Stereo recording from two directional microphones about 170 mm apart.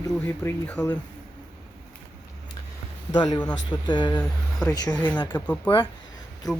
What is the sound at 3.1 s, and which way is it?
Speech, 25° left (ahead or behind).